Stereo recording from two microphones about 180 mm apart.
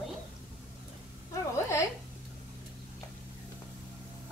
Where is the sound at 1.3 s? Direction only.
15° left (ahead or behind).